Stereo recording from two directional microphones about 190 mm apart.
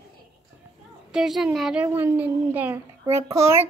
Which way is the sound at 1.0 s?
5° right (ahead or behind).